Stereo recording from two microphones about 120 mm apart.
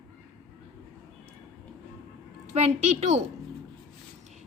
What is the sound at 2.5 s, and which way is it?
Speech, 65° right (ahead or behind).